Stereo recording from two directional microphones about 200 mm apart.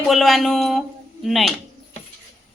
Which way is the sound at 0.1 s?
Centre (ahead or behind).